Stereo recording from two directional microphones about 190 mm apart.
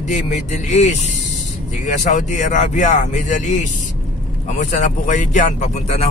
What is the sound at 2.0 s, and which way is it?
Speech, 40° left (ahead or behind).